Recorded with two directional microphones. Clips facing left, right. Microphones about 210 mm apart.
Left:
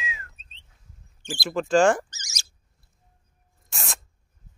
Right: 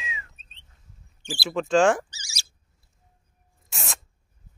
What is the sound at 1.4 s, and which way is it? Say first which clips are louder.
Speech: left 1 dB; centre (ahead or behind).